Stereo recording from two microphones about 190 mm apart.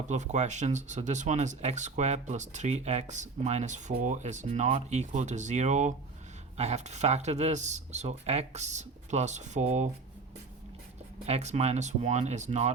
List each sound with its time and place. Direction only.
0.1 s speech: 40° right (ahead or behind)
11.3 s speech: 35° right (ahead or behind)